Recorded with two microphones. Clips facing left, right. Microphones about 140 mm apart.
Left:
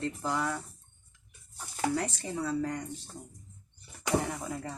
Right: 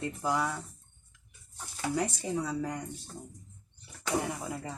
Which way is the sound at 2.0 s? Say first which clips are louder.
Right 2 dB; 15° right (ahead or behind).